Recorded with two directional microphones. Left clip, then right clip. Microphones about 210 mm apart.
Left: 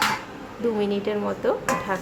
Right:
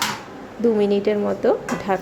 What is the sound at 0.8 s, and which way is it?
Speech, 15° right (ahead or behind).